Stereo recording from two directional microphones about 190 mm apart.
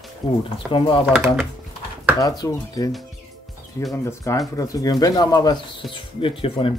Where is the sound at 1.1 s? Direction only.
5° right (ahead or behind).